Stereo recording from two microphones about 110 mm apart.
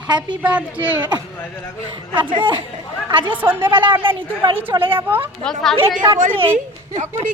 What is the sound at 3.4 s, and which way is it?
Speech, 15° right (ahead or behind).